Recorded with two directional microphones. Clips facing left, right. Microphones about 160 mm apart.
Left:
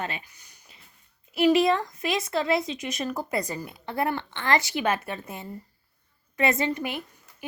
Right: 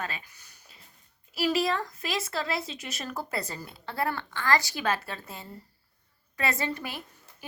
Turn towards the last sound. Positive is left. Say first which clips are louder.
# left 7 dB
turn(degrees=15)  # may be behind; listen again after turning